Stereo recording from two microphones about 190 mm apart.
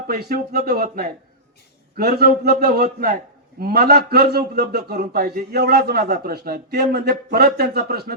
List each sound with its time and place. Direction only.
0.1 s a man's voice: 55° right (ahead or behind)